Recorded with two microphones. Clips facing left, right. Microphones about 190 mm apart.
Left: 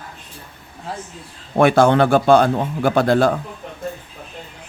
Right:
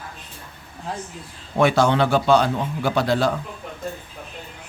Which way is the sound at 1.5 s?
55° left (ahead or behind).